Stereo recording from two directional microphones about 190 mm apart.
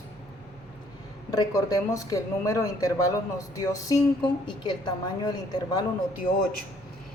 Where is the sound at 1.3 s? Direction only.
20° left (ahead or behind).